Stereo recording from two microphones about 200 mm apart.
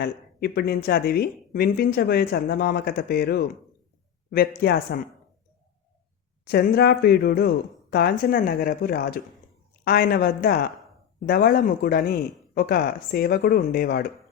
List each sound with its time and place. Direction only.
0.0 s speech: 50° left (ahead or behind)
6.4 s speech: 50° left (ahead or behind)